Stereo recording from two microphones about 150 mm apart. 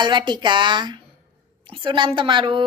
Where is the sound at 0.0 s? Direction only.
30° right (ahead or behind).